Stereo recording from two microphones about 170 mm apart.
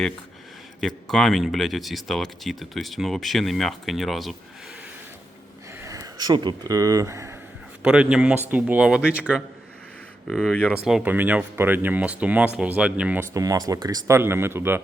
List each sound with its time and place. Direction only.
0.8 s speech: centre (ahead or behind)
5.8 s speech: 20° right (ahead or behind)
7.8 s speech: 5° right (ahead or behind)
10.8 s speech: 5° right (ahead or behind)
13.3 s speech: 20° right (ahead or behind)